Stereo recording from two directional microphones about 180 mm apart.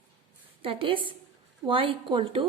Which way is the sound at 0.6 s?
30° right (ahead or behind).